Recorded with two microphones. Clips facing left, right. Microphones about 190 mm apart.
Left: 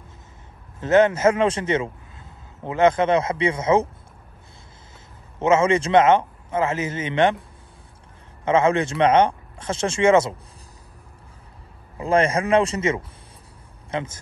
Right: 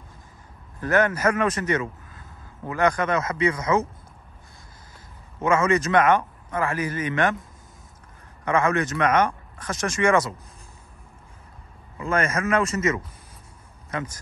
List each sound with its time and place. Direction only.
0.7 s speech: 25° left (ahead or behind)
5.4 s a man's voice: 25° left (ahead or behind)
8.5 s a man's voice: 25° left (ahead or behind)
12.0 s a man's voice: 30° left (ahead or behind)